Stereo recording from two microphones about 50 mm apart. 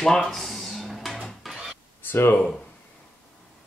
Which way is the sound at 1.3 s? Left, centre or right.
Centre.